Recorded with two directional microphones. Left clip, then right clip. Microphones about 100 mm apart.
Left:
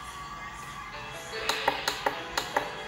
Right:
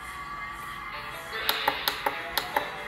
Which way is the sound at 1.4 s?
5° right (ahead or behind).